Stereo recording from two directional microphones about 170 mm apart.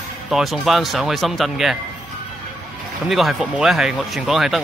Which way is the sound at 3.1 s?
Centre (ahead or behind).